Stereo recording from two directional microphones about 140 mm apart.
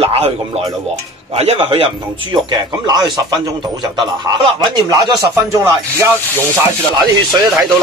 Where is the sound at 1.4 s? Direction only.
45° right (ahead or behind).